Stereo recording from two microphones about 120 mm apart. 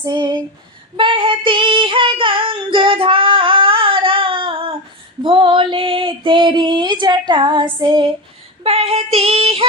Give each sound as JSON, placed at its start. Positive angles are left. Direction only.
{"t": 0.0, "sound": "a sound", "side_deg": -40}
{"t": 0.9, "sound": "child singing", "side_deg": -45}
{"t": 5.2, "sound": "female singing", "side_deg": -45}
{"t": 8.6, "sound": "child singing", "side_deg": -55}
{"t": 9.1, "sound": "female singing", "side_deg": -55}